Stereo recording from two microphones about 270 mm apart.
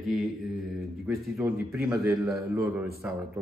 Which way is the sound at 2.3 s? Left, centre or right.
Centre.